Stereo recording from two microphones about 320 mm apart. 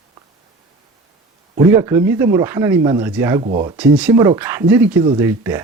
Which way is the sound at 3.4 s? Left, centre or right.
Centre.